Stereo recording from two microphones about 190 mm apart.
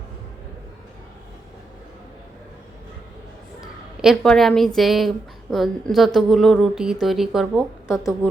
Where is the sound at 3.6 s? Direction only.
5° right (ahead or behind).